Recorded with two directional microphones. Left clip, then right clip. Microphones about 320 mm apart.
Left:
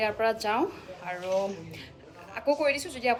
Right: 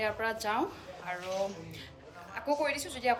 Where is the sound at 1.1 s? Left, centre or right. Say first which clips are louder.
Left 6 dB; centre.